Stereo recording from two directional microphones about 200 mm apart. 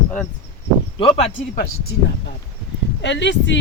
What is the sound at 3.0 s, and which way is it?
Speech, 60° left (ahead or behind).